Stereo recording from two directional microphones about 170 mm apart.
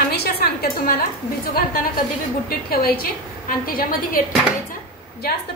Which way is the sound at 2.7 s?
60° left (ahead or behind).